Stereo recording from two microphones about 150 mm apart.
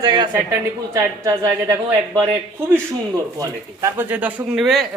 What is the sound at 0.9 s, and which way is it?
Speech, 15° right (ahead or behind).